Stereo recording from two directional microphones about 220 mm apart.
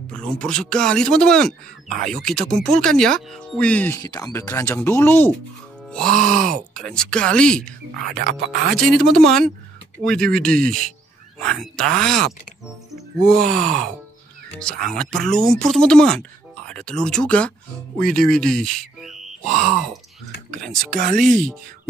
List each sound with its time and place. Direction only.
0.1 s speech: 5° left (ahead or behind)
8.2 s speech: 45° right (ahead or behind)
8.7 s speech: centre (ahead or behind)
12.9 s music: centre (ahead or behind)
13.6 s speech: 5° left (ahead or behind)
20.9 s speech: 40° right (ahead or behind)